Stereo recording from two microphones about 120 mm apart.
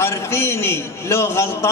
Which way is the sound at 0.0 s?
20° left (ahead or behind).